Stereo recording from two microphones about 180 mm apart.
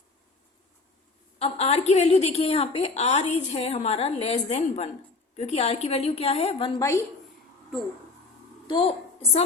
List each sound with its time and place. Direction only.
1.4 s a woman's voice: 35° left (ahead or behind)
6.7 s a woman's voice: 15° left (ahead or behind)
8.6 s a sound: 30° left (ahead or behind)